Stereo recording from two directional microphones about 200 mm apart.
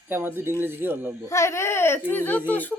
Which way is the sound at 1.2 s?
15° left (ahead or behind).